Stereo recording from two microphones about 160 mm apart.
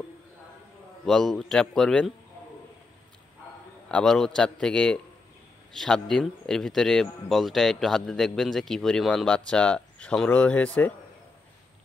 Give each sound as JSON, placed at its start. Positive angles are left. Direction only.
{"t": 1.0, "sound": "speech", "side_deg": 0}
{"t": 3.9, "sound": "speech", "side_deg": 0}